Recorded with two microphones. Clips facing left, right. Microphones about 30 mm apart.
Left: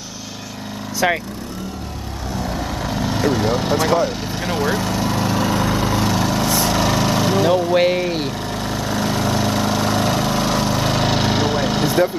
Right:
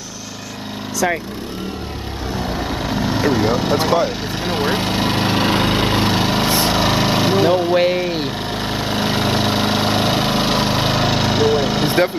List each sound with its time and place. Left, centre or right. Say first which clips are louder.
1.0 s speech: left 1 dB; left
2.5 s vehicle: right 3 dB; centre
7.7 s speech: even; centre
8.6 s lawn mower: right 1 dB; right
11.0 s lawn mower: right 1 dB; centre